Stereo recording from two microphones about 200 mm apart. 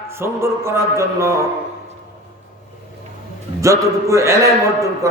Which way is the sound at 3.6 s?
15° right (ahead or behind).